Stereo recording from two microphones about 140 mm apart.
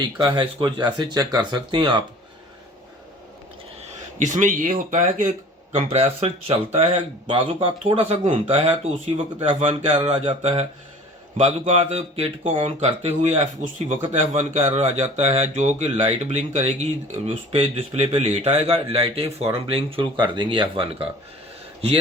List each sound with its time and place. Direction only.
0.0 s speech: 35° right (ahead or behind)
3.8 s speech: 65° right (ahead or behind)
5.7 s speech: 50° right (ahead or behind)
17.2 s speech: 40° right (ahead or behind)